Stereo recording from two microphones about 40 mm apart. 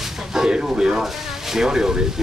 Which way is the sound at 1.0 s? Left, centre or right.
Centre.